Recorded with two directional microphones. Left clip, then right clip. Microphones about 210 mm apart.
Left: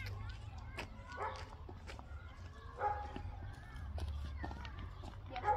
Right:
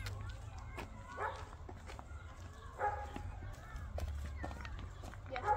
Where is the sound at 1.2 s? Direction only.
35° left (ahead or behind).